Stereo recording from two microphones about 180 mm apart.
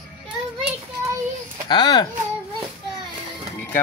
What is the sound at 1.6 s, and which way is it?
Speech, 25° left (ahead or behind).